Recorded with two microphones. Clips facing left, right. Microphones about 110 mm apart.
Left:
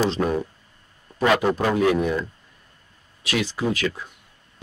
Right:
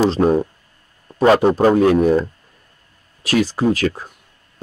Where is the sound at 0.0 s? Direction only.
35° right (ahead or behind).